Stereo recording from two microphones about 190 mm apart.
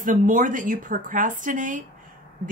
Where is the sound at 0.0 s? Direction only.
45° right (ahead or behind).